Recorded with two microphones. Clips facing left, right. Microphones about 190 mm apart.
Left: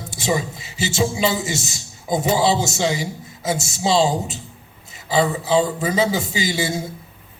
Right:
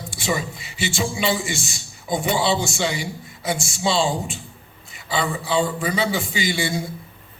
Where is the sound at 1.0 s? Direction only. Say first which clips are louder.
Left 3 dB; 25° left (ahead or behind).